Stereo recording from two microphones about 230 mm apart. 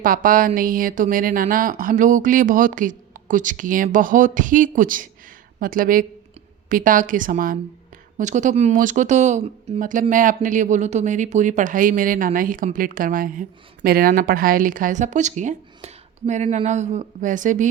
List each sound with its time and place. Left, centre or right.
0.0 s speech: right